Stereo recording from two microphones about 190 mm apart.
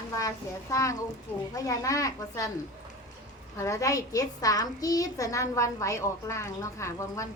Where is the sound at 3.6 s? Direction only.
15° left (ahead or behind).